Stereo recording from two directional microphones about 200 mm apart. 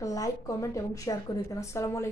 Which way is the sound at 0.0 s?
15° left (ahead or behind).